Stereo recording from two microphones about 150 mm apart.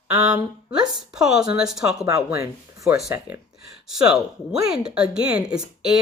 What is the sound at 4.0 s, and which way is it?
Speech, 5° right (ahead or behind).